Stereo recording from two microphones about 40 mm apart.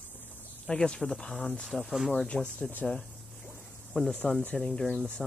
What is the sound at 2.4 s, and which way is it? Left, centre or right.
Speech, left.